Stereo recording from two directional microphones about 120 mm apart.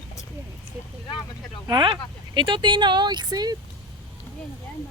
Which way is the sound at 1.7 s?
40° right (ahead or behind).